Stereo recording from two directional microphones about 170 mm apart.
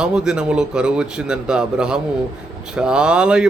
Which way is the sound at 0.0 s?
5° right (ahead or behind).